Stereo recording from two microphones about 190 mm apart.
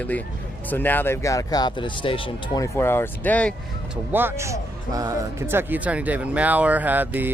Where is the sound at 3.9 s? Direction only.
10° right (ahead or behind).